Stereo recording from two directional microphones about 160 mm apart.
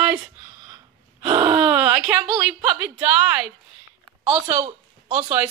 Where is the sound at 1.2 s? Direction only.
25° right (ahead or behind).